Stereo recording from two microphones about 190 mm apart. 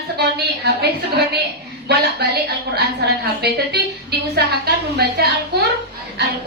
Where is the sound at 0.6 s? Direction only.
60° right (ahead or behind).